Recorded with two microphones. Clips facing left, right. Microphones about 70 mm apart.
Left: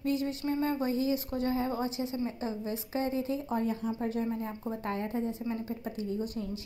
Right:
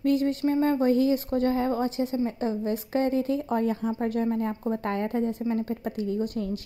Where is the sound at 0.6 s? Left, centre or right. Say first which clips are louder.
Right 8 dB; right.